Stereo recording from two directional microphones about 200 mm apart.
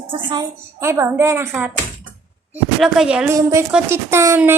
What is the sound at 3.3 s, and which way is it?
A woman's voice, 15° right (ahead or behind).